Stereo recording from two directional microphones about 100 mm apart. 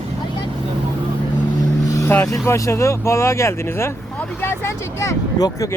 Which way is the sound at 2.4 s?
30° left (ahead or behind).